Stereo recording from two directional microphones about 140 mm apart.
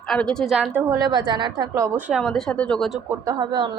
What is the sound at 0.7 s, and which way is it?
A woman's voice, 20° right (ahead or behind).